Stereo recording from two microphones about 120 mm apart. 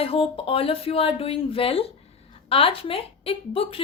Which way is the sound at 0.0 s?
50° left (ahead or behind).